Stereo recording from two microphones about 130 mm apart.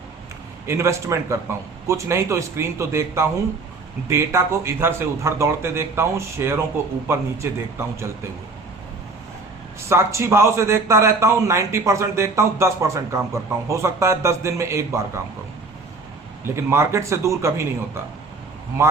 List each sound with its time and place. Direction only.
0.7 s a man's voice: 20° right (ahead or behind)
7.8 s a man's voice: 20° right (ahead or behind)
9.9 s a man's voice: 20° right (ahead or behind)
16.4 s a man's voice: 20° right (ahead or behind)